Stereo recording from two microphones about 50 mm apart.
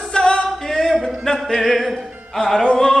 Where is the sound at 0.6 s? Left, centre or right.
Centre.